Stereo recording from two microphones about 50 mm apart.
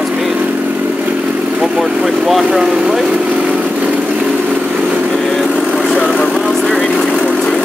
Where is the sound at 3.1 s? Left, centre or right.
Right.